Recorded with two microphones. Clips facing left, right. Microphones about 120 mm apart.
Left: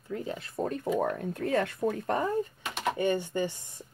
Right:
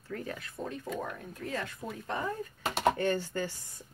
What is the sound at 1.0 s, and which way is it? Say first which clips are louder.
Speech: left 9 dB; 65° left (ahead or behind).